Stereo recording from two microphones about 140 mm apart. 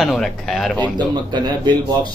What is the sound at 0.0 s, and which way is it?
Speech, centre (ahead or behind).